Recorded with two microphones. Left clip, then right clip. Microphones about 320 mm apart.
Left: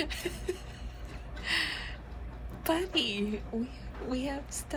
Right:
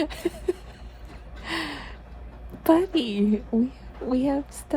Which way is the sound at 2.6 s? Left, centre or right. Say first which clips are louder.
Right 9 dB; right.